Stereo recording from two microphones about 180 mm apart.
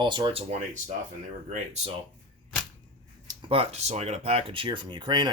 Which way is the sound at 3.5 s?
35° right (ahead or behind).